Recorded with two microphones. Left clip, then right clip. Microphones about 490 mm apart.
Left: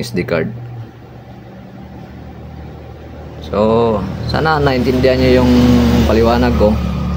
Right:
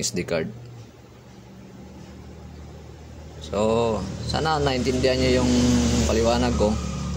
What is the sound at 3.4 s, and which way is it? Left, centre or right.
Speech, right.